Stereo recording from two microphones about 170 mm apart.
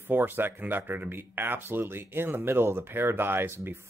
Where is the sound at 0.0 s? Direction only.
10° right (ahead or behind).